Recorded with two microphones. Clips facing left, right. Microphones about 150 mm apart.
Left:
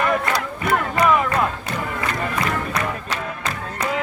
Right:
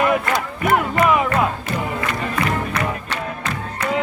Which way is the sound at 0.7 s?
5° right (ahead or behind).